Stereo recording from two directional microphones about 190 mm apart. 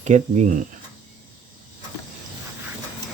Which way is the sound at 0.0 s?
40° right (ahead or behind).